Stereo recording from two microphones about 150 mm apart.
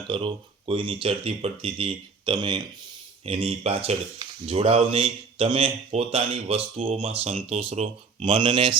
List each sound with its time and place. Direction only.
0.1 s speech: 35° right (ahead or behind)